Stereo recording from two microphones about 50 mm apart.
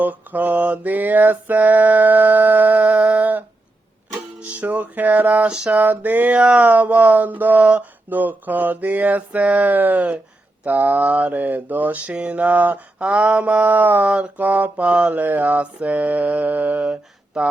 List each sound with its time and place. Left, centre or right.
0.0 s mantra: right
4.4 s music: right
5.5 s a sound: centre
5.7 s mantra: right
8.1 s mantra: right
15.1 s mantra: right